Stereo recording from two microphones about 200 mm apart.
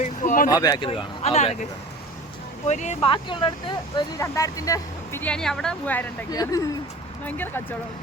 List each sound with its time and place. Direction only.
0.0 s a sound: 40° left (ahead or behind)
0.5 s speech: 20° left (ahead or behind)
2.6 s speech: 35° left (ahead or behind)
3.1 s speech: 25° left (ahead or behind); by 6.1 s 5° left (ahead or behind)
6.3 s speech: 20° left (ahead or behind)